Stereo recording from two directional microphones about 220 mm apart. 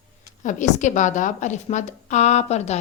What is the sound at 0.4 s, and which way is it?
A woman's voice, 35° left (ahead or behind).